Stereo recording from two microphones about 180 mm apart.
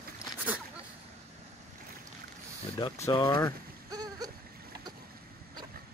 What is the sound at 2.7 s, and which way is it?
Speech, 25° left (ahead or behind).